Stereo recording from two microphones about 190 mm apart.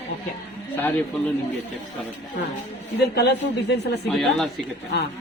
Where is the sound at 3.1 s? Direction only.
60° left (ahead or behind).